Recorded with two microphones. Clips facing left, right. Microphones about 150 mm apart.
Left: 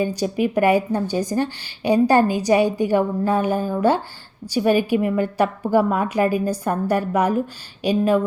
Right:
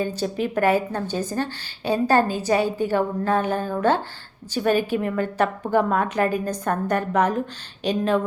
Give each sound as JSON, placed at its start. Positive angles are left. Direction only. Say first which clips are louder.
{"t": 0.0, "sound": "speech", "louder": "left 4 dB", "side_deg": 15}